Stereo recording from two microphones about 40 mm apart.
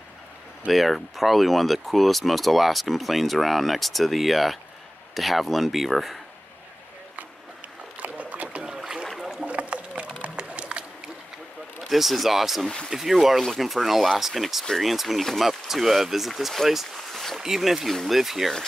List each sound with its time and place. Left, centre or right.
0.7 s speech: centre
8.0 s rowboat: right
8.7 s rowboat: centre
9.0 s boat: centre
9.4 s rowboat: right
10.2 s music: right
11.9 s speech: centre
16.6 s a sound: centre
17.4 s speech: centre